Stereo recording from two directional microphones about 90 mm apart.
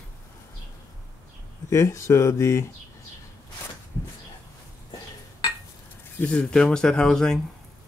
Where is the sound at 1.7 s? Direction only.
35° left (ahead or behind).